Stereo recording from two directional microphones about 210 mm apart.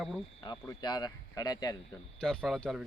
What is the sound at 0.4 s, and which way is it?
Speech, 20° left (ahead or behind).